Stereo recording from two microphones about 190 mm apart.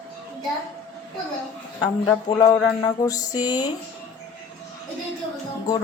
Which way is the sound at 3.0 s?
20° left (ahead or behind).